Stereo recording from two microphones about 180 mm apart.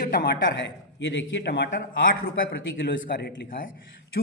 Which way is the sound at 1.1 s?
70° left (ahead or behind).